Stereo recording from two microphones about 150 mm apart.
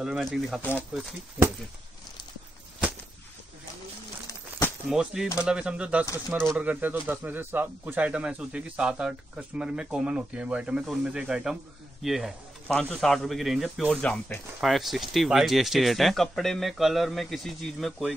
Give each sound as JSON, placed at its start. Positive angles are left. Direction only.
{"t": 0.0, "sound": "speech", "side_deg": -5}
{"t": 0.6, "sound": "speech", "side_deg": 10}
{"t": 4.3, "sound": "a sound", "side_deg": 15}
{"t": 4.8, "sound": "speech", "side_deg": -5}